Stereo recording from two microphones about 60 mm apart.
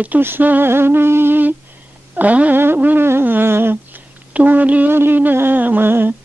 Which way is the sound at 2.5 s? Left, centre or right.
Right.